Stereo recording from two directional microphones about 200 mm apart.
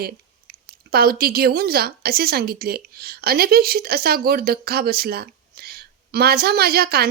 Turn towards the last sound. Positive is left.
turn(degrees=-50)  # may be behind; listen again after turning